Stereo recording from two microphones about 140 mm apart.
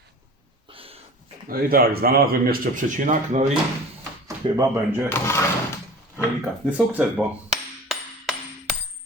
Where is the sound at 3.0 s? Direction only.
60° right (ahead or behind).